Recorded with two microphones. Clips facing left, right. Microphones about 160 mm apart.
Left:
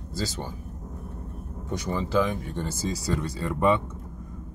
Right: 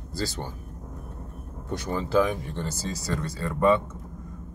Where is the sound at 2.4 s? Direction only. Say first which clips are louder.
Left 2 dB; 10° left (ahead or behind).